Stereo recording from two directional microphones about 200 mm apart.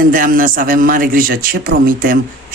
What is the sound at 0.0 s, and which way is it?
A man's voice, 45° right (ahead or behind).